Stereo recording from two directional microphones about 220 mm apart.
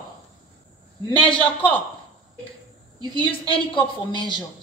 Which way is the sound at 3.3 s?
25° left (ahead or behind).